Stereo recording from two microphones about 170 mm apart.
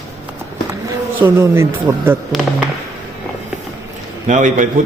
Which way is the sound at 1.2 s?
15° right (ahead or behind).